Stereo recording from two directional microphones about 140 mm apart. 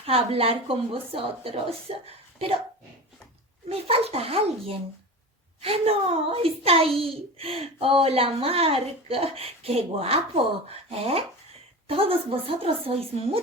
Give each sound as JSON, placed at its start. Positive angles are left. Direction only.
{"t": 0.0, "sound": "speech", "side_deg": -45}
{"t": 3.7, "sound": "speech", "side_deg": -45}